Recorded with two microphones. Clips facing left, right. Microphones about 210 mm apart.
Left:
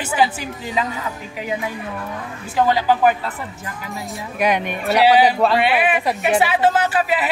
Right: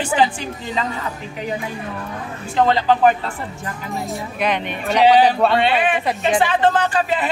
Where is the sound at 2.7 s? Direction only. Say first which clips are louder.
Right 1 dB; 10° left (ahead or behind).